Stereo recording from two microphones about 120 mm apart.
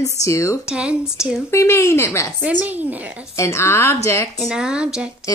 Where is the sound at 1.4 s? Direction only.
25° left (ahead or behind).